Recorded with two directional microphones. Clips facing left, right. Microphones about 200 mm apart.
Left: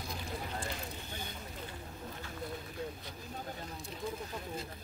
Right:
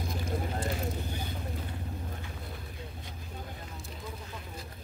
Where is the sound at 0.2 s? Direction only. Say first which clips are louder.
Right 8 dB; 45° right (ahead or behind).